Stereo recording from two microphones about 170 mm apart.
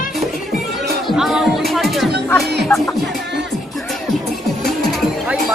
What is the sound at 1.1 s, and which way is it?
Music, centre (ahead or behind).